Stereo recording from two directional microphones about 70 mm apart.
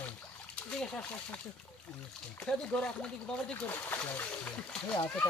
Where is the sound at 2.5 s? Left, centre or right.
Centre.